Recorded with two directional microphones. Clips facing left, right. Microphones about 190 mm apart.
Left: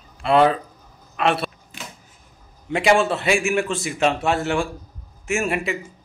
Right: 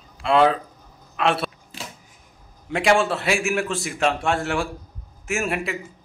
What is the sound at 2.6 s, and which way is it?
Speech, centre (ahead or behind).